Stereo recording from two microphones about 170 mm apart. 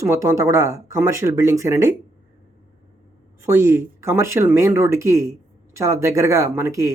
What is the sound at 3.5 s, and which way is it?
Speech, 15° right (ahead or behind).